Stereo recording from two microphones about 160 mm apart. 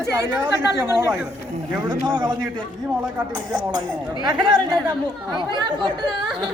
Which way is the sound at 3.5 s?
25° right (ahead or behind).